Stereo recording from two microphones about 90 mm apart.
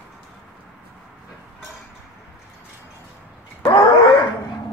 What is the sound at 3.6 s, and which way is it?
Groan, 65° left (ahead or behind).